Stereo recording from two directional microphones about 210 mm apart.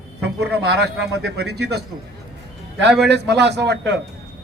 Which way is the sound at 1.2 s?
50° right (ahead or behind).